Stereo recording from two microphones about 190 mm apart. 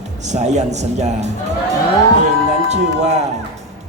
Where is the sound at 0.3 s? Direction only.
35° right (ahead or behind).